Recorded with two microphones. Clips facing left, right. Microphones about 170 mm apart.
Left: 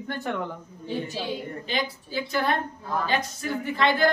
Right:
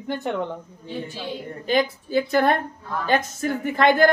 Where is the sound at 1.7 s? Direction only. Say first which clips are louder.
Right 10 dB; 50° right (ahead or behind).